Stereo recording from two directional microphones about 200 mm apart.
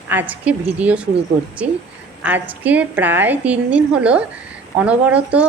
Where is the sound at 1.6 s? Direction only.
40° right (ahead or behind).